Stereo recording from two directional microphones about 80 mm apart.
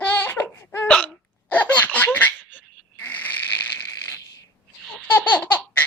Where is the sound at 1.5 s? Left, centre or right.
Left.